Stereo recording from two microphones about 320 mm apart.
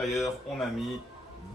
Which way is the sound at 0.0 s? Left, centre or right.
Centre.